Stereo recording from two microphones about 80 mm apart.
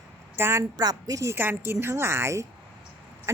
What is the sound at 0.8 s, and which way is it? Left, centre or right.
Speech, right.